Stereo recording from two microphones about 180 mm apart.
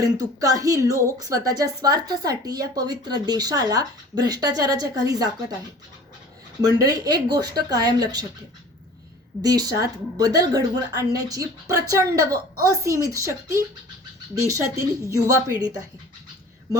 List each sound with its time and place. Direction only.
0.0 s speech: 20° right (ahead or behind)
6.7 s speech: 20° right (ahead or behind)
9.4 s a woman's voice: 20° right (ahead or behind)